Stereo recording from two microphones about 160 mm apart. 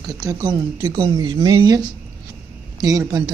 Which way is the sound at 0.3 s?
25° right (ahead or behind).